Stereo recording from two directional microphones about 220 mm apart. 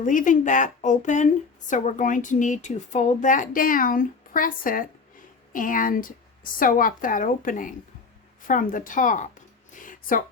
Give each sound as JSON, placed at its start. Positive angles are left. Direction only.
{"t": 0.0, "sound": "a woman's voice", "side_deg": 35}